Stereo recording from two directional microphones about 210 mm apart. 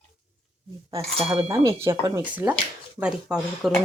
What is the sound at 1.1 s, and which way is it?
Speech, 25° right (ahead or behind).